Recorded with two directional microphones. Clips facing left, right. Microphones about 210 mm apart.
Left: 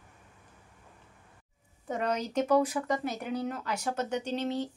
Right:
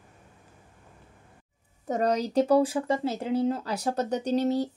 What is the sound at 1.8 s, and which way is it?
Speech, 40° right (ahead or behind).